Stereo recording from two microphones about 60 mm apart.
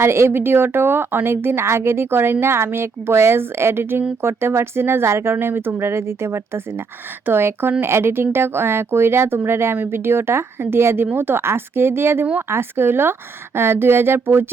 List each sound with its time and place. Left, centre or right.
0.0 s speech: right